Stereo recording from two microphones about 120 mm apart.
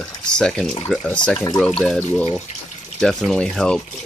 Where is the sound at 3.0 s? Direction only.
5° left (ahead or behind).